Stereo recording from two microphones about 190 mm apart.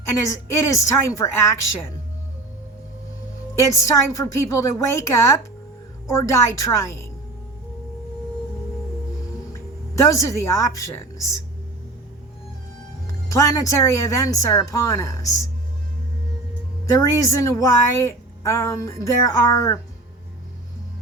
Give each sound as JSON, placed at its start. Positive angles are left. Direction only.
{"t": 0.2, "sound": "a woman's voice", "side_deg": 15}
{"t": 3.6, "sound": "a woman's voice", "side_deg": 15}
{"t": 10.0, "sound": "a woman's voice", "side_deg": 15}
{"t": 13.2, "sound": "a woman's voice", "side_deg": 15}
{"t": 17.1, "sound": "a woman's voice", "side_deg": 15}